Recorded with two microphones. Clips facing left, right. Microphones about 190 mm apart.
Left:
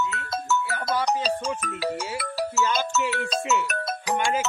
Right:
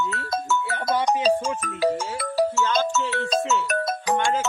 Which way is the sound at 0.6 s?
25° right (ahead or behind).